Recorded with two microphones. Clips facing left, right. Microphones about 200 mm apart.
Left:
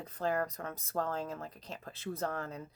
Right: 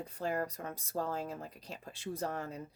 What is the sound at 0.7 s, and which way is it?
Speech, 35° right (ahead or behind).